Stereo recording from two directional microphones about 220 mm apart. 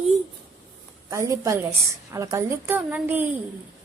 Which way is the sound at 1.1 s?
15° right (ahead or behind).